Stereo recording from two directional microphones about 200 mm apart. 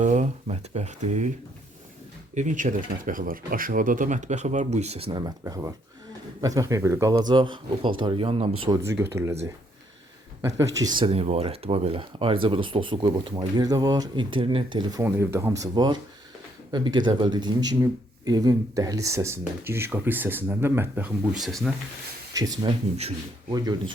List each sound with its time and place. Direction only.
0.0 s speech: 35° right (ahead or behind)
2.3 s speech: 40° right (ahead or behind)
8.9 s speech: 15° right (ahead or behind)
10.4 s speech: 15° right (ahead or behind)
15.0 s speech: 15° right (ahead or behind)
22.3 s speech: 20° right (ahead or behind)